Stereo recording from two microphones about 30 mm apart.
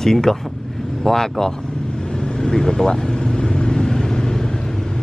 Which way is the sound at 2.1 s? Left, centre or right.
Left.